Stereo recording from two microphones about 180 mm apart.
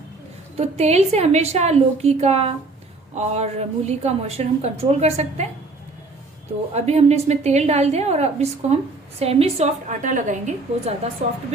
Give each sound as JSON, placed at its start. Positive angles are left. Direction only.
{"t": 0.5, "sound": "a woman's voice", "side_deg": -35}
{"t": 6.7, "sound": "a woman's voice", "side_deg": -35}